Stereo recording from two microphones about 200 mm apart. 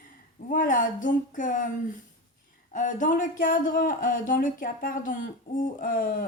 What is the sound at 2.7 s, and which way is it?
Speech, 40° left (ahead or behind).